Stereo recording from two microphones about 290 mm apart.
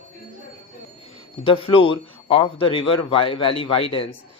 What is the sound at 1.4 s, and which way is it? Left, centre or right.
A man's voice, centre.